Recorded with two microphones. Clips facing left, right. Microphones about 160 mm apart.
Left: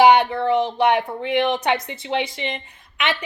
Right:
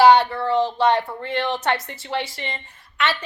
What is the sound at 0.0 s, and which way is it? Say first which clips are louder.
A woman's voice: even; 15° left (ahead or behind).